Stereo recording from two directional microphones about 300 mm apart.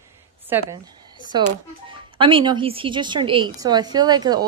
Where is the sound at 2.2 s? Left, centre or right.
Centre.